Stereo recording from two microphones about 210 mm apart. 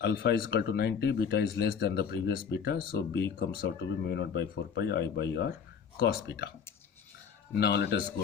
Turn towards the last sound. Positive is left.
turn(degrees=50)  # may be behind; listen again after turning